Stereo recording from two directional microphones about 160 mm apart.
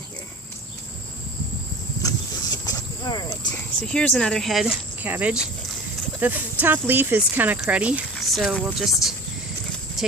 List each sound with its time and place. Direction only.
2.0 s a sound: 20° left (ahead or behind)
3.5 s speech: 5° left (ahead or behind)
10.0 s clip-clop: centre (ahead or behind)